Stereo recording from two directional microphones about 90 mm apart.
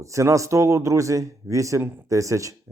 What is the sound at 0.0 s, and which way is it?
Speech, 35° right (ahead or behind).